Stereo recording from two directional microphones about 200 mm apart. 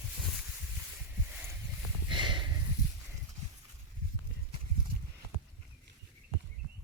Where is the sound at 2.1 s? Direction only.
25° right (ahead or behind).